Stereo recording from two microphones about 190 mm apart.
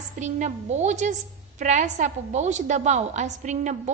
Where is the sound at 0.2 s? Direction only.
40° right (ahead or behind).